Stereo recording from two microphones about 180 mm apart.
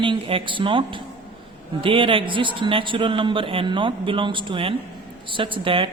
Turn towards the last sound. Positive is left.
turn(degrees=-30)  # may be behind; listen again after turning